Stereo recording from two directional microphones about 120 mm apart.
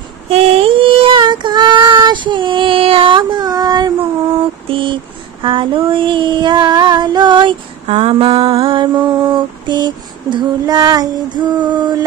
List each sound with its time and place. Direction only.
0.3 s child singing: 50° right (ahead or behind); by 3.9 s 35° right (ahead or behind)
4.6 s a sound: 45° right (ahead or behind)
5.4 s mantra: 45° right (ahead or behind)
7.9 s mantra: 55° right (ahead or behind); by 12.0 s 35° right (ahead or behind)